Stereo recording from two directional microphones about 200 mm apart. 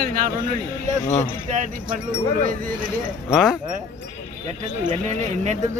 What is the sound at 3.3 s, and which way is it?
Speech, centre (ahead or behind).